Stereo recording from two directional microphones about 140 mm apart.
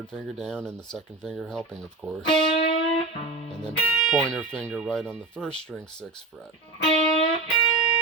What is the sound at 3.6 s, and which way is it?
Speech, centre (ahead or behind).